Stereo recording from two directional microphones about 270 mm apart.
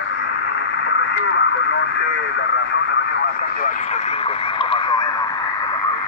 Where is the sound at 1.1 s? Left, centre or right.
Left.